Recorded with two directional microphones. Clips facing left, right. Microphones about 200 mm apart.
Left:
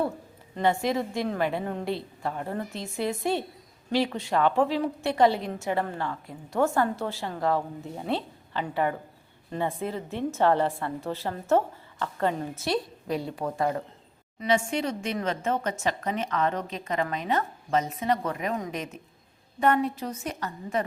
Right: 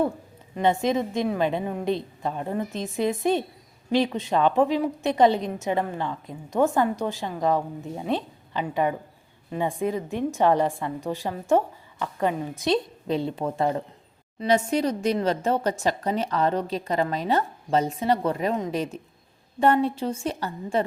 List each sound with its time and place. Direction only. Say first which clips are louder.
0.5 s a woman's voice: right 3 dB; 20° right (ahead or behind)
12.6 s a woman's voice: right 5 dB; 25° right (ahead or behind)
14.3 s a woman's voice: right 4 dB; 40° right (ahead or behind)